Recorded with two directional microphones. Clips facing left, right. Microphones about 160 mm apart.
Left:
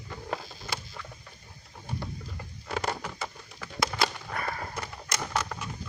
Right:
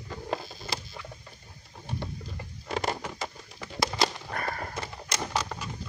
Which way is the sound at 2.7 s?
20° right (ahead or behind).